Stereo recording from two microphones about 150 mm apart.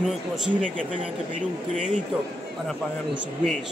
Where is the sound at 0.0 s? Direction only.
Centre (ahead or behind).